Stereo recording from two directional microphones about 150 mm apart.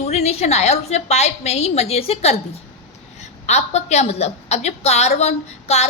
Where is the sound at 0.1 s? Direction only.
45° left (ahead or behind).